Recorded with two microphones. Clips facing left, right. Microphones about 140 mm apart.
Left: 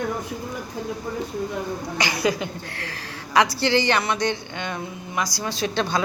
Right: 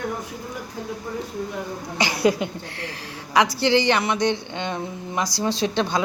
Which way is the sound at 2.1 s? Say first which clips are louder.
Right 6 dB; 25° right (ahead or behind).